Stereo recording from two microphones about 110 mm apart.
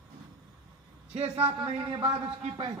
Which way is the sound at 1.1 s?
60° right (ahead or behind).